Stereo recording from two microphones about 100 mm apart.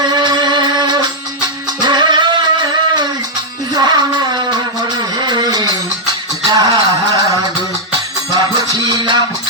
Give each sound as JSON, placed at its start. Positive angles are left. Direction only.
{"t": 0.1, "sound": "music", "side_deg": -45}
{"t": 3.8, "sound": "a sound", "side_deg": -45}
{"t": 8.3, "sound": "music", "side_deg": -40}